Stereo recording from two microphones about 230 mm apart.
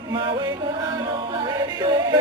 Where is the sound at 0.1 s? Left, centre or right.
Right.